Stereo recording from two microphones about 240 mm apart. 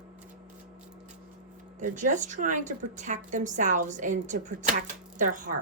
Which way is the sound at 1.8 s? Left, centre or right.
Right.